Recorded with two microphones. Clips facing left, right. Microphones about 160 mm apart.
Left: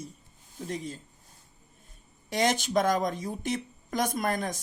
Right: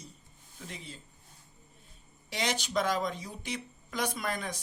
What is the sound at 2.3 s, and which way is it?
Speech, 50° left (ahead or behind).